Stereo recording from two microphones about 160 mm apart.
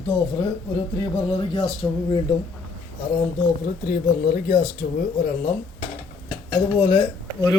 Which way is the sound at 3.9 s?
65° left (ahead or behind).